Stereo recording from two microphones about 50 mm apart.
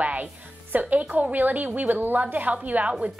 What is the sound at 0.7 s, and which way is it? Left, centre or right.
A woman's voice, right.